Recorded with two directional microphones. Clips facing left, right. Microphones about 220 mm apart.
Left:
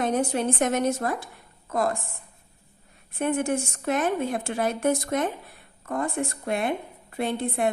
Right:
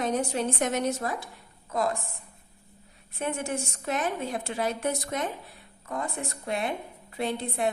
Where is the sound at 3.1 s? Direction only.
55° left (ahead or behind).